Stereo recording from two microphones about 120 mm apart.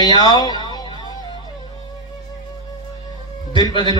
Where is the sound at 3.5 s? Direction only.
35° left (ahead or behind).